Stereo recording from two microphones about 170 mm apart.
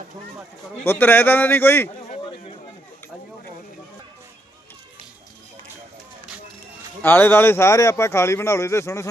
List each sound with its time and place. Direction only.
0.9 s a man's voice: 10° left (ahead or behind)
7.0 s a man's voice: 15° left (ahead or behind)